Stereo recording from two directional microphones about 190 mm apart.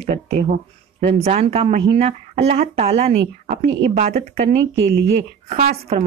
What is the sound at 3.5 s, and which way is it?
Speech, 45° right (ahead or behind).